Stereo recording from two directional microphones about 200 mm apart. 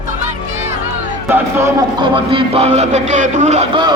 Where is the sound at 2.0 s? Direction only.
25° right (ahead or behind).